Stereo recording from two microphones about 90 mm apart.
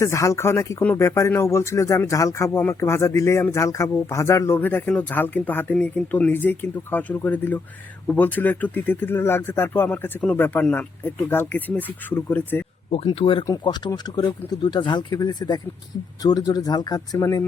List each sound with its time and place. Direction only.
0.0 s speech: 35° left (ahead or behind)
4.9 s speech: 15° left (ahead or behind)
13.1 s speech: 70° left (ahead or behind)
13.5 s speech: 55° left (ahead or behind); by 17.4 s 40° left (ahead or behind)